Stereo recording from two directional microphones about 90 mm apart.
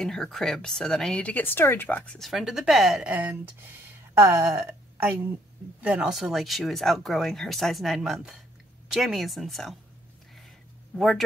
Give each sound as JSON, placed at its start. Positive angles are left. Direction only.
{"t": 0.0, "sound": "speech", "side_deg": 5}
{"t": 2.1, "sound": "speech", "side_deg": 0}
{"t": 3.1, "sound": "a woman's voice", "side_deg": -15}
{"t": 6.1, "sound": "speech", "side_deg": 0}
{"t": 11.0, "sound": "speech", "side_deg": 0}